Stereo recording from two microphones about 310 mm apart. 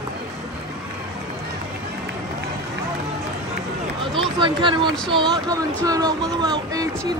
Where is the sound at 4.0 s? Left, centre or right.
Centre.